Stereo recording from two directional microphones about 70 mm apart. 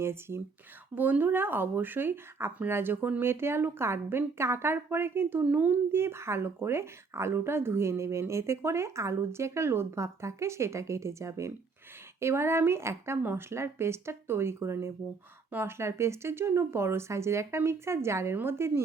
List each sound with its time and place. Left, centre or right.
0.0 s speech: right